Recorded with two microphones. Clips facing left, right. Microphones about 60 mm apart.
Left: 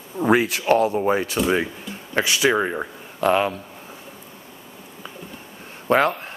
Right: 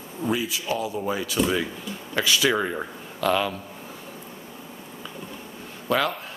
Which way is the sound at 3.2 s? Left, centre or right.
Left.